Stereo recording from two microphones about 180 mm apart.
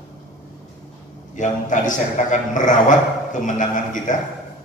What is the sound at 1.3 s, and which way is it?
A man's voice, 45° left (ahead or behind).